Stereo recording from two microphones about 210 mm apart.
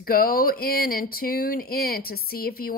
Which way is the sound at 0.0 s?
45° left (ahead or behind).